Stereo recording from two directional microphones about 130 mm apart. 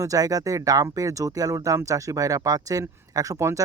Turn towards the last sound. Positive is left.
turn(degrees=-25)  # may be behind; listen again after turning